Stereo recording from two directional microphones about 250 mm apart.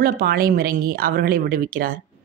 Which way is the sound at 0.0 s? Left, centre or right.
Right.